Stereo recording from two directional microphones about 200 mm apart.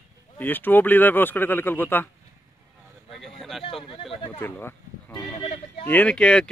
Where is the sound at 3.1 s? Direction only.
Centre (ahead or behind).